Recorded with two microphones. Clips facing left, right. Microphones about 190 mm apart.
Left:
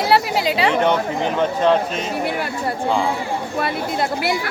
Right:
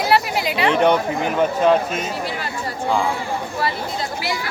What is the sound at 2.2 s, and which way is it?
Speech, 60° left (ahead or behind).